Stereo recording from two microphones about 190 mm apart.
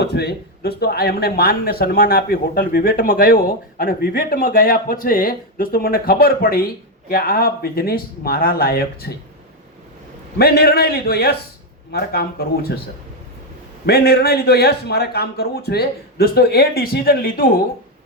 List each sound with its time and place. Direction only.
0.0 s speech: 60° left (ahead or behind)
10.3 s a man's voice: 55° left (ahead or behind)
13.8 s a man's voice: 55° left (ahead or behind)